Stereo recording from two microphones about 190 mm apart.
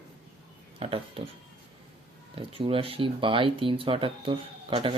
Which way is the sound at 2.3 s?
30° right (ahead or behind).